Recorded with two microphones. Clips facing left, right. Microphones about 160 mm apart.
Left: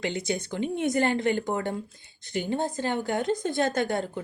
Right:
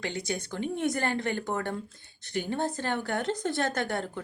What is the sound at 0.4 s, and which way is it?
A woman's voice, 20° left (ahead or behind).